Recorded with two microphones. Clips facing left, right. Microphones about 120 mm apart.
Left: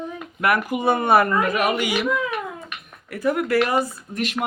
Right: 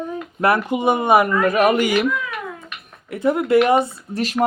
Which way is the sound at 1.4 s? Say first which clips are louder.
Right 5 dB; 45° right (ahead or behind).